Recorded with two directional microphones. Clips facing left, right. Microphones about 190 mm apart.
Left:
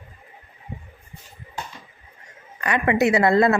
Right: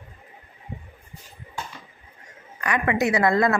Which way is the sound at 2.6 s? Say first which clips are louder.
Left 3 dB; 25° left (ahead or behind).